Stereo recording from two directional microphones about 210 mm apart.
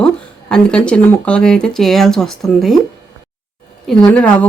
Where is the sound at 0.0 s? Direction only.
5° left (ahead or behind).